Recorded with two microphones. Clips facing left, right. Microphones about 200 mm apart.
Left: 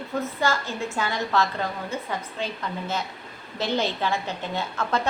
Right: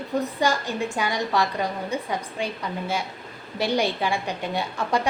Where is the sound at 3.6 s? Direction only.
15° right (ahead or behind).